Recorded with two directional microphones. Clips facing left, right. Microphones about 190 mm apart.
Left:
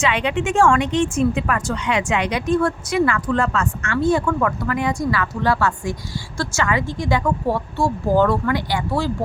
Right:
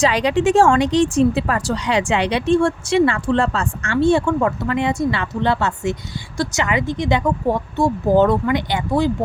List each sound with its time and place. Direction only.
0.0 s speech: 35° right (ahead or behind); by 9.1 s 20° right (ahead or behind)